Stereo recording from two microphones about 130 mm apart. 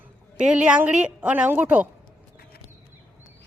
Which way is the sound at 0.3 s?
10° right (ahead or behind).